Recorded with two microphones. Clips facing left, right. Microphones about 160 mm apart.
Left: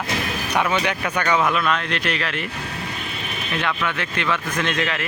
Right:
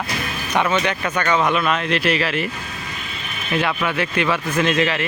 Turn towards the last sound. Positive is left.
turn(degrees=0)  # may be behind; listen again after turning